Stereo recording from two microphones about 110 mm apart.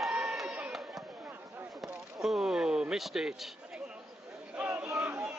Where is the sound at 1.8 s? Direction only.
Centre (ahead or behind).